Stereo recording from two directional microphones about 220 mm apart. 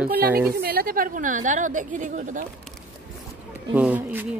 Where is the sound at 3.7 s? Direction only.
5° right (ahead or behind).